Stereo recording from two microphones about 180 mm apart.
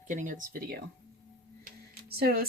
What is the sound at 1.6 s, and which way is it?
Tick-tock, 60° right (ahead or behind).